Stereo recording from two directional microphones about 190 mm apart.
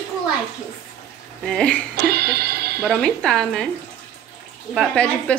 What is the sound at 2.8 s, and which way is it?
Speech, 5° left (ahead or behind).